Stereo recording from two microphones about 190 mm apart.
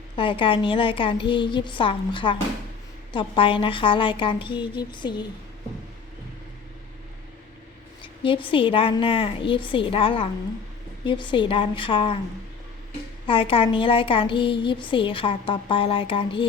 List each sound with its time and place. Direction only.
0.2 s speech: 25° left (ahead or behind)
8.0 s speech: 25° left (ahead or behind)
13.2 s speech: 30° left (ahead or behind)